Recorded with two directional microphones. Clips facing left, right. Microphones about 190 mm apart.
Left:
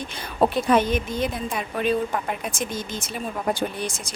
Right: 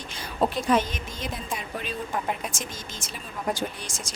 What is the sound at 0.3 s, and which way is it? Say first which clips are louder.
A woman's voice: left 4 dB; 60° left (ahead or behind).